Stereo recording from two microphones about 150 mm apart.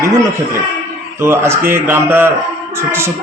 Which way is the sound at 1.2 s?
15° right (ahead or behind).